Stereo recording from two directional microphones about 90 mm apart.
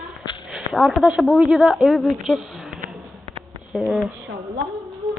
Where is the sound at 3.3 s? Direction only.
90° right.